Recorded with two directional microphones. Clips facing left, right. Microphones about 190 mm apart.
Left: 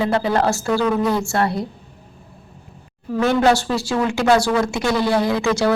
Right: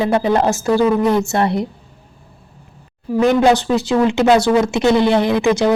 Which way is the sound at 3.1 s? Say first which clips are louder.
Right 3 dB; 15° right (ahead or behind).